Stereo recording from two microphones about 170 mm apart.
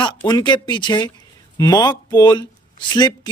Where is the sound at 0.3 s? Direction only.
25° left (ahead or behind).